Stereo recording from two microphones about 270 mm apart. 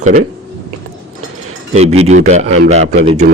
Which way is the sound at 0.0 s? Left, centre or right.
Right.